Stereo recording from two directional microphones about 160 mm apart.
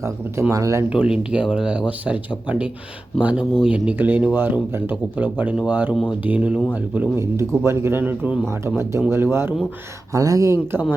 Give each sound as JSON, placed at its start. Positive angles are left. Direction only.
{"t": 0.0, "sound": "speech", "side_deg": -20}
{"t": 0.9, "sound": "speech", "side_deg": -5}